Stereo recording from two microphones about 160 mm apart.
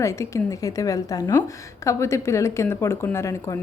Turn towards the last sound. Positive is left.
turn(degrees=20)  # may be behind; listen again after turning